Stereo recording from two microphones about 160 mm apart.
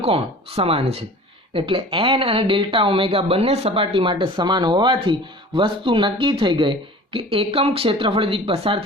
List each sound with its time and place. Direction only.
0.0 s speech: 40° right (ahead or behind)